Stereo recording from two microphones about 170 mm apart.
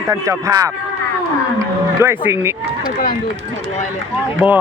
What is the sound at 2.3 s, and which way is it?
Speech, 15° right (ahead or behind).